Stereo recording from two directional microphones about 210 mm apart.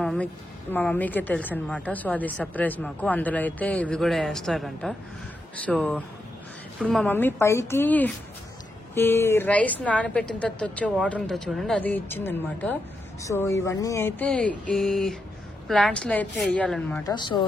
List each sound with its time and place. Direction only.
0.0 s a woman's voice: 5° left (ahead or behind)
17.0 s a woman's voice: 20° left (ahead or behind)